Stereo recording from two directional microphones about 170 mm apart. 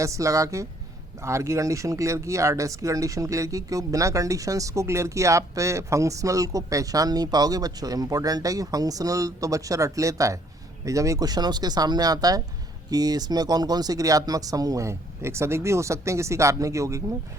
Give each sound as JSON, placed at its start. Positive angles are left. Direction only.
{"t": 0.0, "sound": "speech", "side_deg": -20}